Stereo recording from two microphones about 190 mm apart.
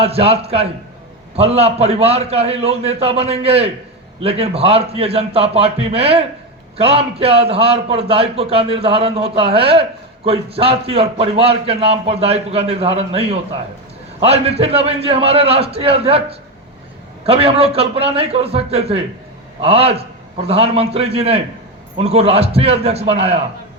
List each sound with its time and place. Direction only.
0.0 s a man's voice: 30° right (ahead or behind)